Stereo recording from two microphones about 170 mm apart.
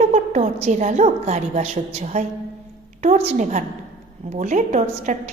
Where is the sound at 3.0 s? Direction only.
40° right (ahead or behind).